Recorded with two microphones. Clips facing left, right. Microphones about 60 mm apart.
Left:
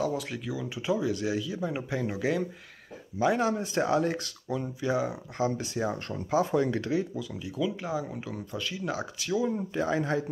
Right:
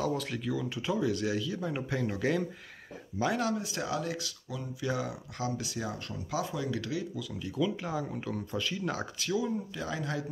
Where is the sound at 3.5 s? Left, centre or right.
Left.